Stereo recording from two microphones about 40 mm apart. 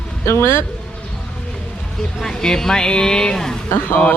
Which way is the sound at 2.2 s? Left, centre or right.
Centre.